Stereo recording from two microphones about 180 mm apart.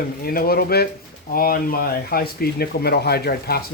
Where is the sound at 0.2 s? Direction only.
55° left (ahead or behind).